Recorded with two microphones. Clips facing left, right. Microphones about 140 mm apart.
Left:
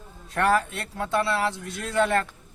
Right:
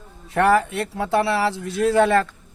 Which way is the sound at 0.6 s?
20° right (ahead or behind).